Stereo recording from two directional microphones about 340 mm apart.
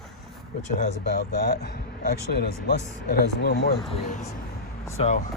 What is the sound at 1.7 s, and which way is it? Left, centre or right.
Speech, left.